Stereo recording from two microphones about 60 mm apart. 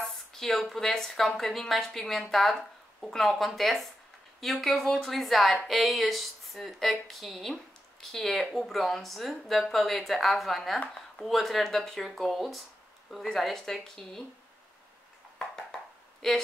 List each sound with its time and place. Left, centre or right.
0.0 s speech: centre
10.8 s speech: centre
11.2 s speech: centre
15.3 s a sound: centre